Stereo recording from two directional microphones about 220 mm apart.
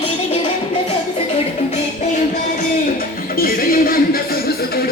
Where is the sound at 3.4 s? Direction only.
40° left (ahead or behind).